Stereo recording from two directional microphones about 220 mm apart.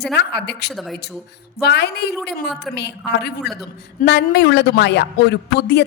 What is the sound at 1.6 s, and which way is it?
Speech, 50° left (ahead or behind).